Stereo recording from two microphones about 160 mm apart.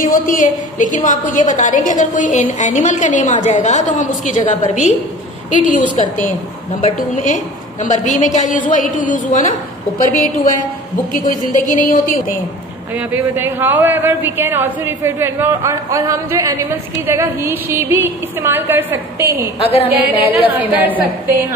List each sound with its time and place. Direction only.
0.0 s a woman's voice: 55° left (ahead or behind)
6.8 s a woman's voice: 50° left (ahead or behind)
12.9 s speech: 10° right (ahead or behind)
19.6 s a woman's voice: 35° left (ahead or behind)
20.4 s speech: 10° right (ahead or behind)